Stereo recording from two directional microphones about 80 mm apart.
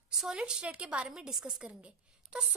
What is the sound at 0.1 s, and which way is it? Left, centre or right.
A woman's voice, centre.